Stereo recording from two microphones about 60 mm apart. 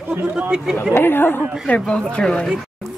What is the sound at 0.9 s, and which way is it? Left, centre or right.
Speech, left.